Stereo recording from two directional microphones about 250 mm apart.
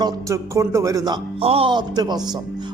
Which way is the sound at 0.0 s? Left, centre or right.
Centre.